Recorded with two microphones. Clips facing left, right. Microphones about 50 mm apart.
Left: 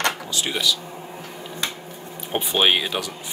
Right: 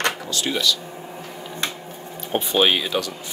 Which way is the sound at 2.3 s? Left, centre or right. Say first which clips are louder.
Right 1 dB; centre.